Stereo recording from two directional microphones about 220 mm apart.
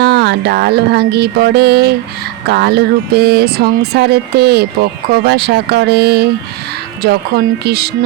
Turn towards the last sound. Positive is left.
turn(degrees=-45)  # may be behind; listen again after turning